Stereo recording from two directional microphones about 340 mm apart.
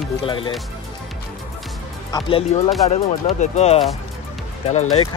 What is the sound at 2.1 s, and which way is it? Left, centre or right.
Speech, centre.